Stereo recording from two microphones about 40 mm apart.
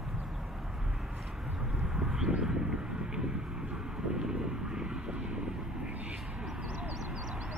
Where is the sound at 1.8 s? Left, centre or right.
Centre.